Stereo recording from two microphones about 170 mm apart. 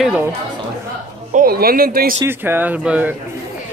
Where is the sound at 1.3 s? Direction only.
60° right (ahead or behind).